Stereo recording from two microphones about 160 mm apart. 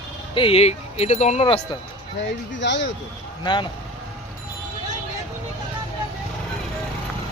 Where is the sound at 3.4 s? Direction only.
30° left (ahead or behind).